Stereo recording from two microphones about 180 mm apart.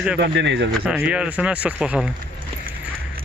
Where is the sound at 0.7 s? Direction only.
5° right (ahead or behind).